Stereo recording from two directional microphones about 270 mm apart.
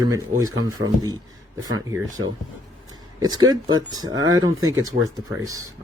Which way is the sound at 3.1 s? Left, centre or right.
Centre.